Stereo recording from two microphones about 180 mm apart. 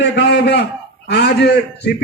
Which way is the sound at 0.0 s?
65° left (ahead or behind).